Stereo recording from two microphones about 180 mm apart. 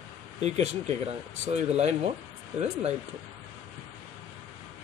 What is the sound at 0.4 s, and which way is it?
Speech, 40° right (ahead or behind).